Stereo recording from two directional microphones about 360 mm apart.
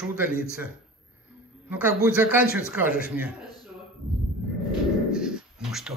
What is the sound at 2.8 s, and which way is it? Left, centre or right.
Speech, left.